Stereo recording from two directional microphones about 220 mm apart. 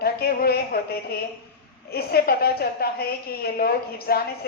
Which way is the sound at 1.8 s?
45° left (ahead or behind).